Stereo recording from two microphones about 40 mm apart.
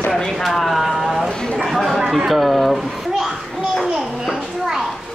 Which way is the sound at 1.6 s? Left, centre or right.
Centre.